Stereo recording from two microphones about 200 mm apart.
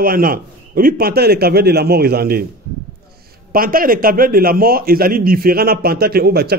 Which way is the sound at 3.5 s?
45° right (ahead or behind).